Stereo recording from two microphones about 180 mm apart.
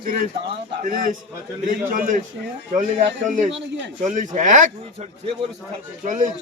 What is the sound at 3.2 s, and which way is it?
A man's voice, 45° right (ahead or behind).